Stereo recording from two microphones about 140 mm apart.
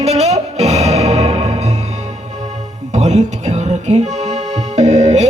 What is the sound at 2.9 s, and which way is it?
Music, 55° right (ahead or behind).